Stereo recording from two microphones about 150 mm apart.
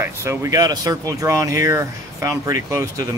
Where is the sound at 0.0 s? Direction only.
20° right (ahead or behind).